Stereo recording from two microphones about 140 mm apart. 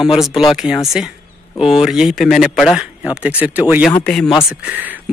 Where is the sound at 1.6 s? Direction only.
5° right (ahead or behind).